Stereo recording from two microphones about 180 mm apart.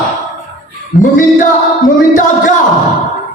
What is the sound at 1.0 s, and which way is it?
Music, 45° left (ahead or behind).